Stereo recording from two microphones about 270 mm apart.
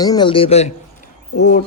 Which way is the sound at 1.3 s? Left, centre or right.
Left.